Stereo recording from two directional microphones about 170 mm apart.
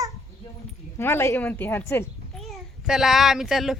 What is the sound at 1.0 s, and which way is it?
A woman's voice, 15° left (ahead or behind).